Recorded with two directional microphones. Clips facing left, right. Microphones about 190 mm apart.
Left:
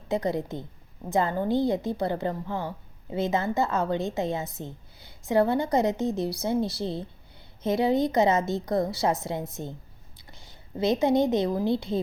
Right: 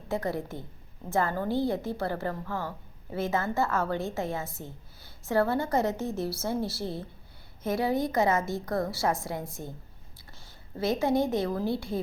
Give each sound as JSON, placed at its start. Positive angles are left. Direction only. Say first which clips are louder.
{"t": 0.1, "sound": "a woman's voice", "louder": "left 4 dB", "side_deg": 20}